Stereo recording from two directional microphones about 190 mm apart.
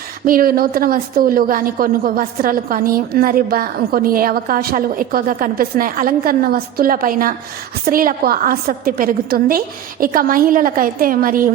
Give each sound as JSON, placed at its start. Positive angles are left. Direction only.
{"t": 0.3, "sound": "a woman's voice", "side_deg": -50}